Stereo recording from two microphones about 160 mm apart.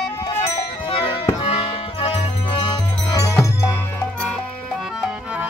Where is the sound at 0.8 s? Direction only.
35° left (ahead or behind).